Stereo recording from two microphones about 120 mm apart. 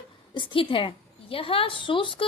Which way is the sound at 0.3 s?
45° left (ahead or behind).